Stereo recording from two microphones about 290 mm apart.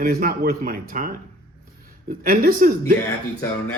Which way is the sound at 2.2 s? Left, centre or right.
Right.